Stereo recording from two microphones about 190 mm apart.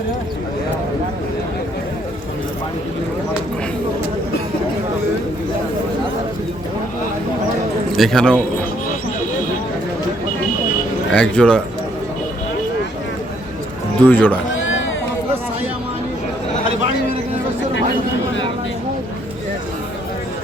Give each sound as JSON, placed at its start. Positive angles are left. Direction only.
{"t": 7.9, "sound": "speech", "side_deg": 0}
{"t": 11.1, "sound": "speech", "side_deg": 5}
{"t": 14.1, "sound": "speech", "side_deg": 10}
{"t": 14.5, "sound": "sheep", "side_deg": 90}